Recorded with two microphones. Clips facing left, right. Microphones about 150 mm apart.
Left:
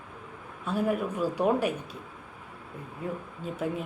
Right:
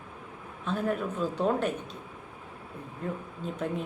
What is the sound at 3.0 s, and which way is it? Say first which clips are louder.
Speech: even; 10° left (ahead or behind).